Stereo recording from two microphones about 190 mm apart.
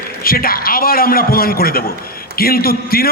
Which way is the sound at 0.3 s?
50° left (ahead or behind).